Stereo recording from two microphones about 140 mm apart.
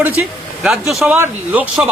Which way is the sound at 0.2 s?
5° right (ahead or behind).